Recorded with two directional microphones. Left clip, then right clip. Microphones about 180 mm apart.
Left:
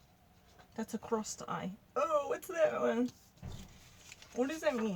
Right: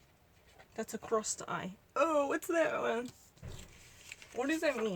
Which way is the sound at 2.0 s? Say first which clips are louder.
Right 3 dB; 65° right (ahead or behind).